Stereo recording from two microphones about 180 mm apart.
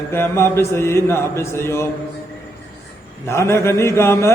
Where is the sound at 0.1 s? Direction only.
15° left (ahead or behind).